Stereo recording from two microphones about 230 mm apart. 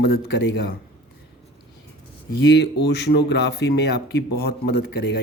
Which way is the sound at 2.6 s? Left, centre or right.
Left.